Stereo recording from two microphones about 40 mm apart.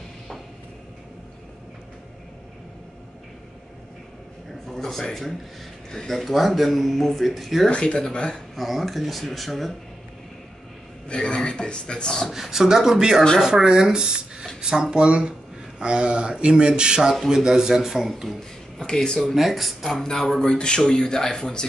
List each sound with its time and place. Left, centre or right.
4.6 s a sound: centre
5.9 s speech: centre
6.1 s speech: centre
7.7 s speech: left
8.5 s speech: centre
11.1 s speech: left
12.3 s speech: centre
18.8 s speech: centre
19.1 s speech: centre
20.0 s speech: centre
20.3 s speech: left